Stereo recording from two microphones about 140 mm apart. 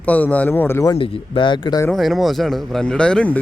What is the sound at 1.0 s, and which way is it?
Speech, 40° left (ahead or behind).